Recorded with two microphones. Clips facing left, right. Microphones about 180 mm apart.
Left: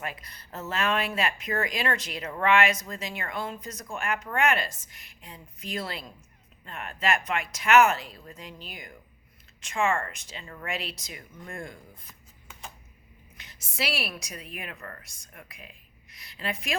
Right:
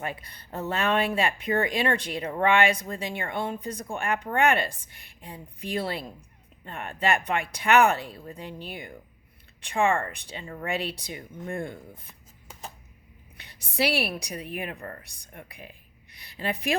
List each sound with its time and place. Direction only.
0.0 s a woman's voice: 30° right (ahead or behind)